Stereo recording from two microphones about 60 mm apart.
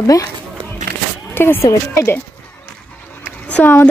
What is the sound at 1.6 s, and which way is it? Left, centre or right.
Speech, left.